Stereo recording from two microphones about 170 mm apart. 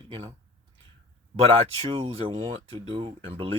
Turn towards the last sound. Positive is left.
turn(degrees=-35)  # may be behind; listen again after turning